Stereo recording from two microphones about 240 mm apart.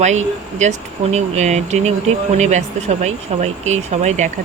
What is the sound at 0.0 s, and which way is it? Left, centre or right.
Speech, right.